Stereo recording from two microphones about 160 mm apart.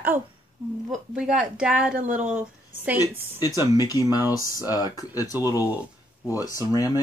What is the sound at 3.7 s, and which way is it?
Speech, 25° left (ahead or behind).